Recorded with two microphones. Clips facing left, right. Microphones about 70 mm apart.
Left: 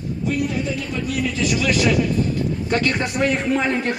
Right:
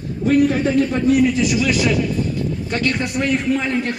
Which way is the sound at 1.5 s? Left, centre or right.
Centre.